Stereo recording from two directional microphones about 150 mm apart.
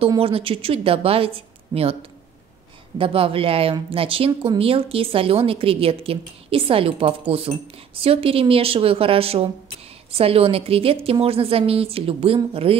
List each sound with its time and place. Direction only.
0.2 s a woman's voice: 40° right (ahead or behind)
3.0 s a woman's voice: 35° right (ahead or behind)